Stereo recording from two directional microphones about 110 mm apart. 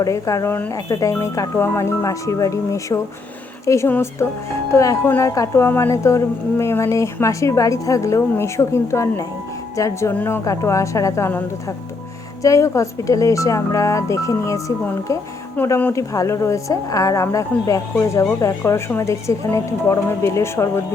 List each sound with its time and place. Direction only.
0.0 s a woman's voice: 30° left (ahead or behind)
12.4 s a woman's voice: 30° left (ahead or behind)